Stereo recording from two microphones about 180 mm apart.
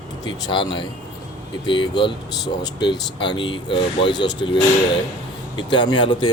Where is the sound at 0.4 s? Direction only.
25° left (ahead or behind).